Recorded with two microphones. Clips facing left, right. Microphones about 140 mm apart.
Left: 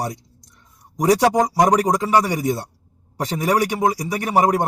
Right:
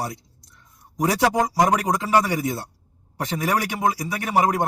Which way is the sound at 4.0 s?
20° left (ahead or behind).